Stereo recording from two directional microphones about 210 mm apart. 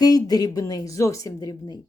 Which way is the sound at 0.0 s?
20° left (ahead or behind).